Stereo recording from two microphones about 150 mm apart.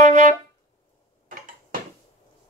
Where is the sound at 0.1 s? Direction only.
55° right (ahead or behind).